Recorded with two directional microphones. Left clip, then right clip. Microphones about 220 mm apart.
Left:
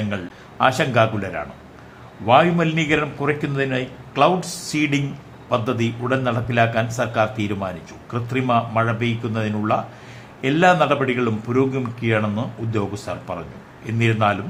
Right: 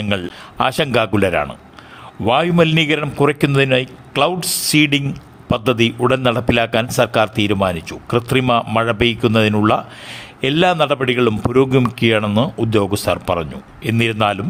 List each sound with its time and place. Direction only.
0.6 s a man's voice: 45° right (ahead or behind)